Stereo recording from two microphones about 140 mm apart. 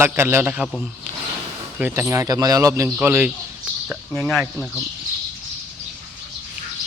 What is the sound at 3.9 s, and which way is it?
Speech, centre (ahead or behind).